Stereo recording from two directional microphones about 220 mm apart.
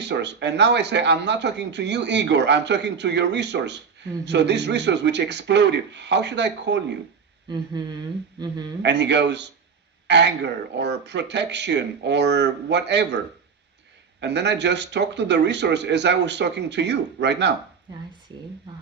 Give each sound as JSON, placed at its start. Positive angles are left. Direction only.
{"t": 0.0, "sound": "speech", "side_deg": -55}
{"t": 7.5, "sound": "speech", "side_deg": -20}
{"t": 8.8, "sound": "speech", "side_deg": -50}
{"t": 14.2, "sound": "speech", "side_deg": -50}